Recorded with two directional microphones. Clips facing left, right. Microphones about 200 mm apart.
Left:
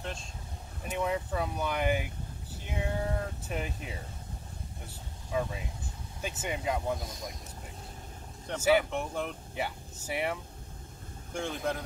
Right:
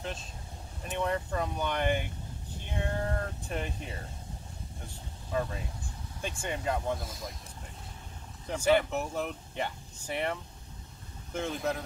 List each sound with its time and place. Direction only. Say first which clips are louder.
0.0 s speech: right 1 dB; centre (ahead or behind)
5.3 s speech: even; 5° left (ahead or behind)
7.0 s speech: even; centre (ahead or behind)
8.5 s speech: even; 5° left (ahead or behind)
8.9 s speech: right 1 dB; 5° right (ahead or behind)